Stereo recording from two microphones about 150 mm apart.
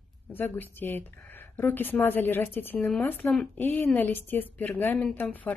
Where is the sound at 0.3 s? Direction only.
15° left (ahead or behind).